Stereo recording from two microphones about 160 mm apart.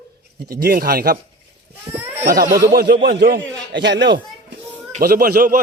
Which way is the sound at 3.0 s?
80° right.